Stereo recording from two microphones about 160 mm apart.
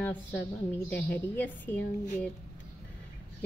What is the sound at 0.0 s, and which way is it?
A woman's voice, 10° left (ahead or behind).